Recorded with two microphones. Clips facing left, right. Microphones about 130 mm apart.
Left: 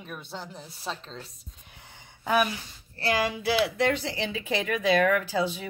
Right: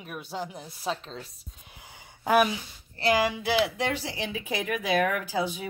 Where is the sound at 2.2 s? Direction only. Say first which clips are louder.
Right 3 dB; 10° right (ahead or behind).